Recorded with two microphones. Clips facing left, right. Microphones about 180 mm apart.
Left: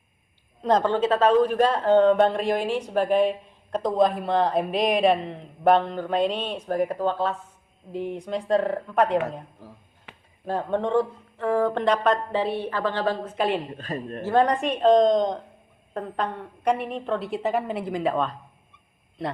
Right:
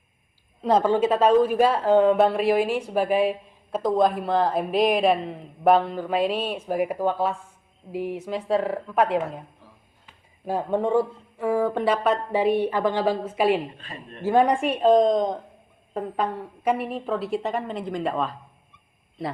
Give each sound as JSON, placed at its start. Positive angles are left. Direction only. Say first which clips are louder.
{"t": 0.6, "sound": "a woman's voice", "louder": "right 1 dB", "side_deg": -5}
{"t": 9.6, "sound": "a sound", "louder": "left 7 dB", "side_deg": 40}
{"t": 10.1, "sound": "a sound", "louder": "left 7 dB", "side_deg": 70}
{"t": 10.4, "sound": "speech", "louder": "right 1 dB", "side_deg": -10}
{"t": 13.7, "sound": "a woman's voice", "louder": "left 8 dB", "side_deg": 45}
{"t": 14.3, "sound": "a woman's voice", "louder": "right 2 dB", "side_deg": -10}